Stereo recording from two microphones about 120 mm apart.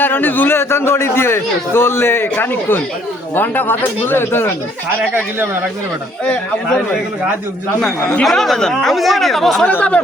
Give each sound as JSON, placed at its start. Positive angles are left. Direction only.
{"t": 0.0, "sound": "a man's voice", "side_deg": 15}
{"t": 6.2, "sound": "speech", "side_deg": 5}
{"t": 8.2, "sound": "speech", "side_deg": 0}